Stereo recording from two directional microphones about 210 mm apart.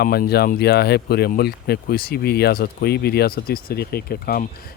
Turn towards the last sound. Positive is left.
turn(degrees=45)  # may be behind; listen again after turning